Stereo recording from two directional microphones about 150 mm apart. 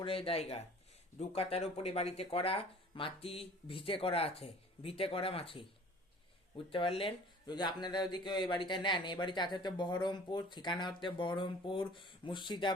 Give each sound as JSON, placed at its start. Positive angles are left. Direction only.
{"t": 0.0, "sound": "speech", "side_deg": 40}
{"t": 6.7, "sound": "speech", "side_deg": 35}